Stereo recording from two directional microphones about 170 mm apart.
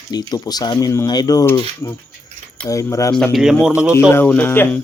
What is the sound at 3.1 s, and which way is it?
Speech, centre (ahead or behind).